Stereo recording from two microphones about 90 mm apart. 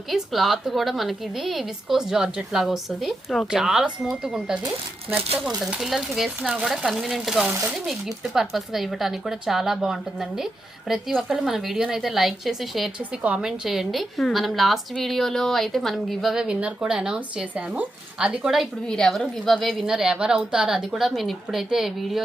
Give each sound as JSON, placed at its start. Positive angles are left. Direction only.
{"t": 0.1, "sound": "speech", "side_deg": 0}
{"t": 5.7, "sound": "speech", "side_deg": -5}